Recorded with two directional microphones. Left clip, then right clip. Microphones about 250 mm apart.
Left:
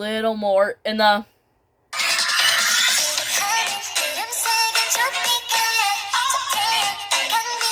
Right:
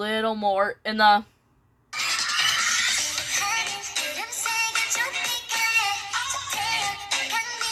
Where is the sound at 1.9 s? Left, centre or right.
Left.